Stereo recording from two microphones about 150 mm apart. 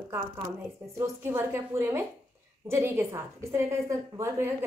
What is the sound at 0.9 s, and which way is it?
A woman's voice, 15° right (ahead or behind).